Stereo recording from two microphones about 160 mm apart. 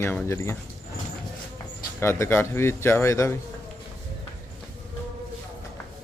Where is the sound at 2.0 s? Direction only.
15° left (ahead or behind).